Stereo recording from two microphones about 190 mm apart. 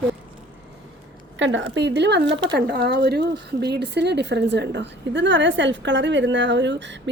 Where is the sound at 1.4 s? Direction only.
75° right (ahead or behind).